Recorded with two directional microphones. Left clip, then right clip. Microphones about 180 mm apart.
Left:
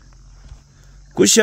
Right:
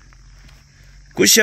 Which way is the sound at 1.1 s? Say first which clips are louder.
Right 1 dB; 20° left (ahead or behind).